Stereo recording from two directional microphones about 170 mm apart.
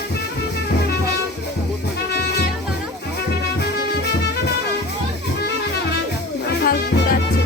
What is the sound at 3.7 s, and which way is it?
Music, 75° left (ahead or behind).